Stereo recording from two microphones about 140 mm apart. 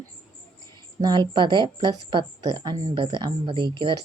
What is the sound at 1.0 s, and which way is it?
A woman's voice, 30° right (ahead or behind).